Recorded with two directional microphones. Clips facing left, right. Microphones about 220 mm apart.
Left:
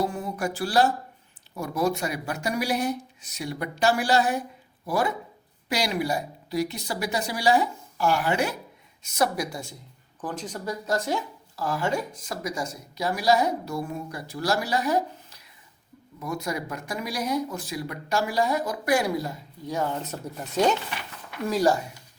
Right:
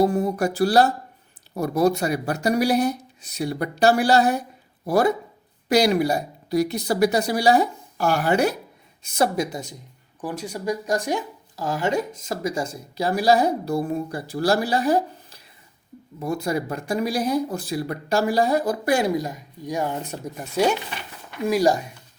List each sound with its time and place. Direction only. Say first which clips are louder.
0.0 s speech: right 8 dB; 40° right (ahead or behind)
9.0 s speech: right 4 dB; 30° right (ahead or behind); by 21.8 s 15° right (ahead or behind)